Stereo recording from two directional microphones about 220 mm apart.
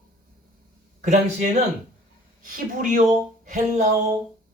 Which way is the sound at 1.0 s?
35° right (ahead or behind).